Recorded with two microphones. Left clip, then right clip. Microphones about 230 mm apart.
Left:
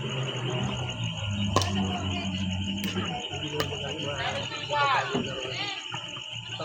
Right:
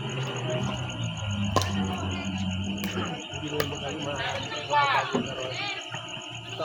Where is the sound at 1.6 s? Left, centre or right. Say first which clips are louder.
Even; centre.